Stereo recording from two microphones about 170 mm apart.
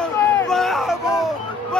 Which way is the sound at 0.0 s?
Centre (ahead or behind).